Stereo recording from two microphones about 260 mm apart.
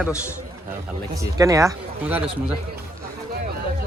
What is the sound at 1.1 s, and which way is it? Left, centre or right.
Speech, centre.